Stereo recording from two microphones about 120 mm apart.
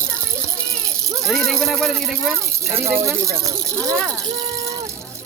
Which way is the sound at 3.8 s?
10° left (ahead or behind).